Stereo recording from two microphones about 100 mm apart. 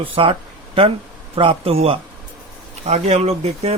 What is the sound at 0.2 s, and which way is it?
Speech, 65° right (ahead or behind).